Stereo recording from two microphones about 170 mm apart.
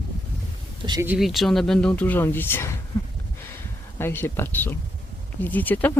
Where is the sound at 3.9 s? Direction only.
15° left (ahead or behind).